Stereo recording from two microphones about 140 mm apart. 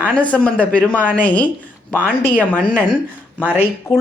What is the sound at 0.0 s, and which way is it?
Speech, 10° left (ahead or behind).